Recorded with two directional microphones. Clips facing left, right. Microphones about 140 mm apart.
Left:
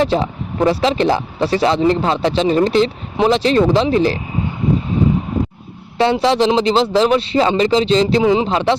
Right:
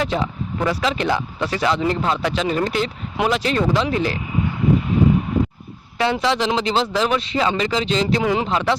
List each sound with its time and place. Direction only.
0.0 s speech: 30° left (ahead or behind)
6.0 s speech: 30° left (ahead or behind)
8.2 s speech: 20° left (ahead or behind)